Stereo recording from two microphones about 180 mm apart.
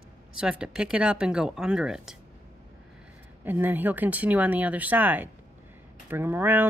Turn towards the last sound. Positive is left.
turn(degrees=-10)  # may be behind; listen again after turning